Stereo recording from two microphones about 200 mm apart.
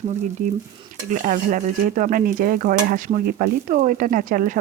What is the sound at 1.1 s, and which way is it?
Speech, 40° right (ahead or behind).